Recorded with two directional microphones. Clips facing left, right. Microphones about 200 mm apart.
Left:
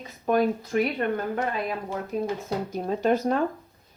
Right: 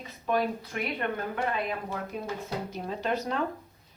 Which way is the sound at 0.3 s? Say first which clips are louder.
Left 6 dB; 45° left (ahead or behind).